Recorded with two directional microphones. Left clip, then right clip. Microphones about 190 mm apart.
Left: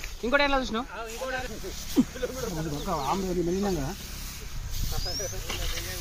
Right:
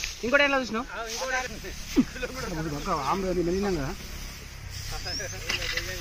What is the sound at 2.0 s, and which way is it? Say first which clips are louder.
Speech: even; 25° left (ahead or behind).